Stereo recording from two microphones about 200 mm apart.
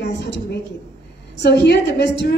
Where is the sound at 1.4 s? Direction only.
60° left (ahead or behind).